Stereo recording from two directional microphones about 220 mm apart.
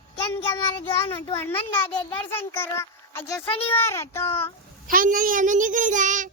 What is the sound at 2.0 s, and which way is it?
A child's voice, 10° left (ahead or behind).